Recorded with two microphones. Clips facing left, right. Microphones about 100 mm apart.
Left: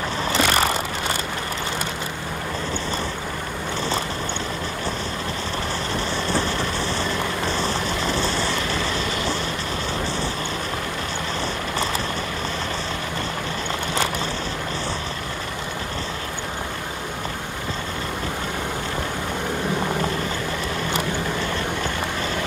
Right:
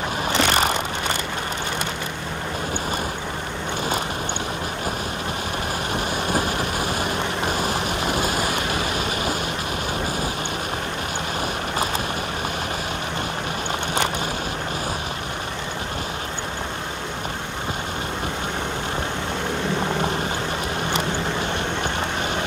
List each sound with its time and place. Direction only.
0.3 s vehicle: 20° right (ahead or behind)
6.2 s thunder: 35° left (ahead or behind)
6.8 s vehicle: 15° right (ahead or behind)
7.5 s rain: 30° left (ahead or behind)
7.9 s rain: 15° right (ahead or behind)
8.6 s a sound: 35° left (ahead or behind)